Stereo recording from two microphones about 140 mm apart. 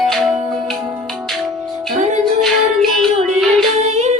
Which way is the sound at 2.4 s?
Centre (ahead or behind).